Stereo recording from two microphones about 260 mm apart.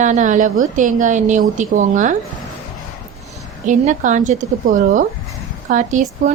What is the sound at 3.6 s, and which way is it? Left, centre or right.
Speech, right.